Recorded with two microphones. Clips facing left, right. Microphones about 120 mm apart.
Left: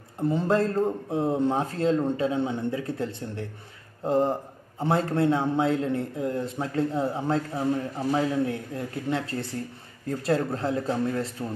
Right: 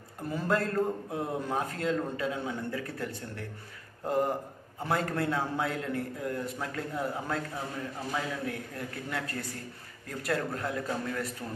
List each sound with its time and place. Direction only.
0.2 s a man's voice: 25° left (ahead or behind)